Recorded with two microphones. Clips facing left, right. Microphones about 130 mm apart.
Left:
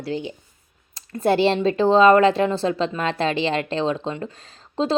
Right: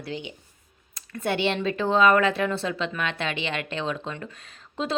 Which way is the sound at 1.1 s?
35° left (ahead or behind).